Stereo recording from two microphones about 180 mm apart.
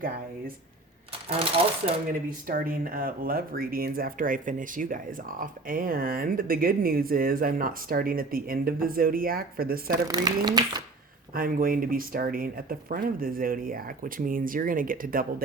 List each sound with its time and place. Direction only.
1.3 s speech: 30° right (ahead or behind)
2.5 s speech: 55° right (ahead or behind)
9.9 s speech: 20° right (ahead or behind)
11.3 s speech: 50° right (ahead or behind)